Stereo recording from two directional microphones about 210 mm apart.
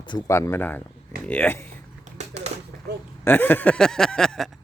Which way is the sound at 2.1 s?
30° right (ahead or behind).